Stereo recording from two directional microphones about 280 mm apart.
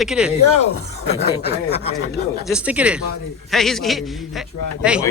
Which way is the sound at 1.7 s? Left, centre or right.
Left.